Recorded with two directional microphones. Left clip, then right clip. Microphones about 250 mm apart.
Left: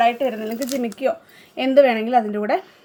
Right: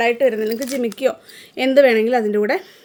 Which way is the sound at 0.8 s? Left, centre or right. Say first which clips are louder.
Right 3 dB; right.